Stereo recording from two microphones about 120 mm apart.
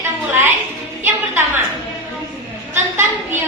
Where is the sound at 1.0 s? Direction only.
20° right (ahead or behind).